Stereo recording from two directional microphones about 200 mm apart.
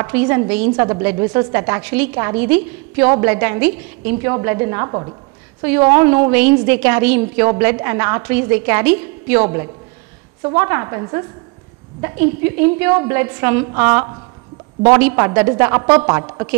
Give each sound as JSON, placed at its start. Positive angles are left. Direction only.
{"t": 0.0, "sound": "a woman's voice", "side_deg": -10}
{"t": 1.1, "sound": "a woman's voice", "side_deg": -20}
{"t": 5.6, "sound": "a woman's voice", "side_deg": -10}